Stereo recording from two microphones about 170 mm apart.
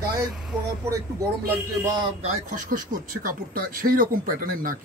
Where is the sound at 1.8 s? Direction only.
25° right (ahead or behind).